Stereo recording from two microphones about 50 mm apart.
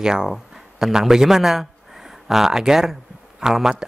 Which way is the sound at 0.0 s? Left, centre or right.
Centre.